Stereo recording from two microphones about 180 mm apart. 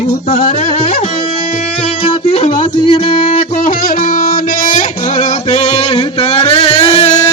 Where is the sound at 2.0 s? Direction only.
35° left (ahead or behind).